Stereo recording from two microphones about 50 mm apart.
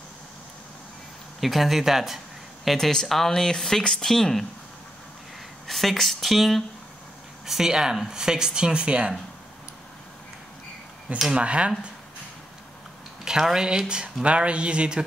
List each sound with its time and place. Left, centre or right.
1.4 s speech: centre
5.7 s speech: centre
11.3 s speech: right
13.2 s speech: centre